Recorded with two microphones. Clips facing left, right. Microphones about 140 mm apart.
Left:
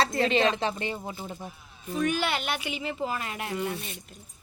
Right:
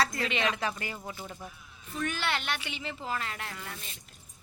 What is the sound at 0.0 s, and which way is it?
A woman's voice, 25° left (ahead or behind).